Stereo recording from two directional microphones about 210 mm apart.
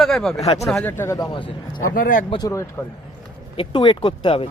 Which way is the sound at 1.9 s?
40° left (ahead or behind).